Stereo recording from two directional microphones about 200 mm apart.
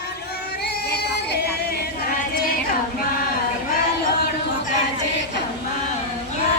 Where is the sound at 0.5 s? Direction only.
50° left (ahead or behind).